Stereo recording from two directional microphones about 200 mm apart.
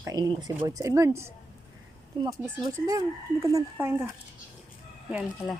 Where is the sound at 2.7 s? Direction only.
15° right (ahead or behind).